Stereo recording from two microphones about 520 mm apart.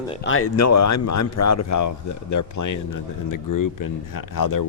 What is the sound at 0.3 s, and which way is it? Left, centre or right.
Speech, left.